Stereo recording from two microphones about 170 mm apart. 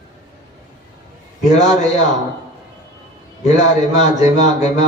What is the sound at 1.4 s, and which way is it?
Speech, 45° left (ahead or behind).